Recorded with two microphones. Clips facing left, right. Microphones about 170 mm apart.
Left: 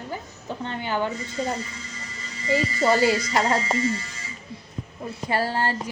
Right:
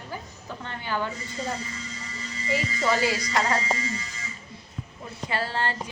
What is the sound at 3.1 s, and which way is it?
Speech, 25° left (ahead or behind).